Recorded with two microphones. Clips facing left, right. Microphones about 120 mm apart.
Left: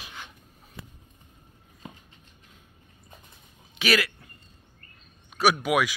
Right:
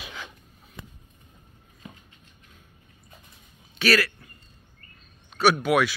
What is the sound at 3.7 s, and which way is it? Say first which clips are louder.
Speech: right 2 dB; 15° left (ahead or behind).